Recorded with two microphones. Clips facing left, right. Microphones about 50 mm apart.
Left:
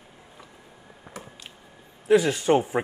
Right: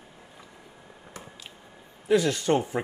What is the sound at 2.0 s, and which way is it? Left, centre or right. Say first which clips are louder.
Speech: left 3 dB; centre.